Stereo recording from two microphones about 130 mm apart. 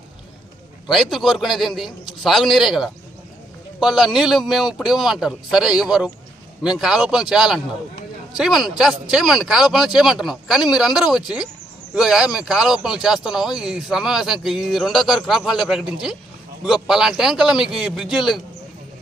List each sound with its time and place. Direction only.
0.9 s speech: centre (ahead or behind)